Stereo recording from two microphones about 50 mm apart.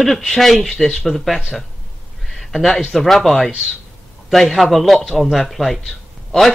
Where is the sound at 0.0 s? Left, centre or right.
Centre.